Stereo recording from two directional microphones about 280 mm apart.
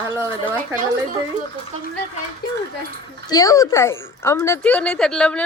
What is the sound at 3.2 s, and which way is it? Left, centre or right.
Speech, centre.